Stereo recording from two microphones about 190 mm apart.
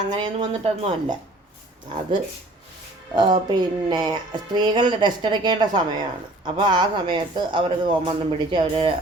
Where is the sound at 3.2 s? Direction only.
25° right (ahead or behind).